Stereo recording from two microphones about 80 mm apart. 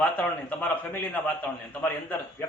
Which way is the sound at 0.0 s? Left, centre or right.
Centre.